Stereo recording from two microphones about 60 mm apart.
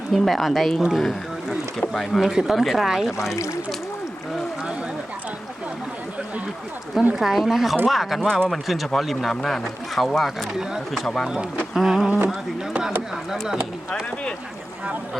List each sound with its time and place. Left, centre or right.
0.1 s speech: centre
2.3 s speech: centre
3.3 s speech: left
7.2 s speech: centre
8.2 s speech: centre
8.6 s speech: centre
11.7 s a sound: centre
13.3 s speech: centre